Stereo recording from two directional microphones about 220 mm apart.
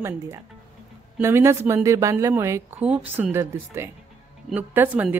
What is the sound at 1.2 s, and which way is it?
A woman's voice, 10° right (ahead or behind).